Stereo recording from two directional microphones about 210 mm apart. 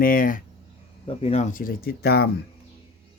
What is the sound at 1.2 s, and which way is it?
Speech, 30° left (ahead or behind).